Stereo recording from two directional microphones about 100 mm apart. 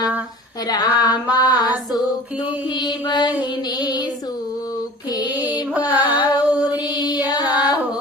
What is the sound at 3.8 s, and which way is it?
Child singing, 40° left (ahead or behind).